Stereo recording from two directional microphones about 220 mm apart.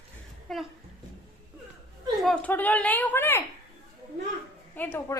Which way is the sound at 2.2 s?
5° left (ahead or behind).